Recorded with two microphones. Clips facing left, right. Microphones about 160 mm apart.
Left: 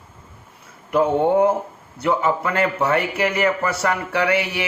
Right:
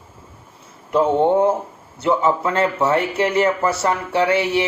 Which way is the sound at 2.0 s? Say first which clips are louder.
Right 2 dB; 25° right (ahead or behind).